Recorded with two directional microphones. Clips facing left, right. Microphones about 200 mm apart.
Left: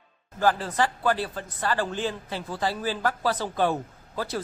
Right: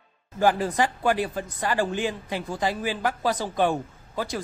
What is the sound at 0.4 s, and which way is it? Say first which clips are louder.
Speech: right 2 dB; 15° right (ahead or behind).